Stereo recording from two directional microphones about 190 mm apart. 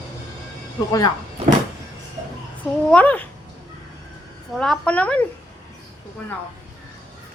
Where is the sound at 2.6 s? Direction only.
5° left (ahead or behind).